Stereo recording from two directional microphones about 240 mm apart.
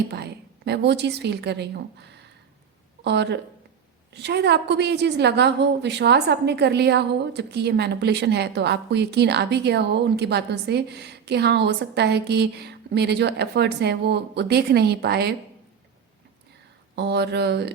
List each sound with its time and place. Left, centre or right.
0.1 s a woman's voice: right
16.9 s a woman's voice: right